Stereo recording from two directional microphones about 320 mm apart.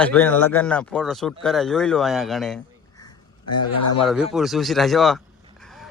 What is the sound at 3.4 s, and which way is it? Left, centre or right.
Speech, left.